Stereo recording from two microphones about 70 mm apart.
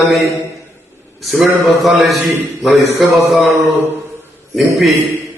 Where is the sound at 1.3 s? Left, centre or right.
Centre.